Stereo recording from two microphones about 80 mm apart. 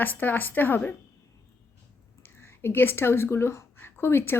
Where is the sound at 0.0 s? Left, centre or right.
Left.